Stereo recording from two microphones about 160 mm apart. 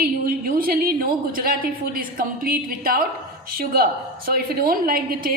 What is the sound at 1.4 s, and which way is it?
A woman's voice, 65° right (ahead or behind).